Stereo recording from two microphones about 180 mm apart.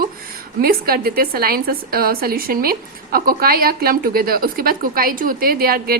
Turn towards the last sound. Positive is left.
turn(degrees=-55)  # may be behind; listen again after turning